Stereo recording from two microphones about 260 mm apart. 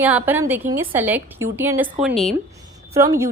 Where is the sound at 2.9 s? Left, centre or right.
Centre.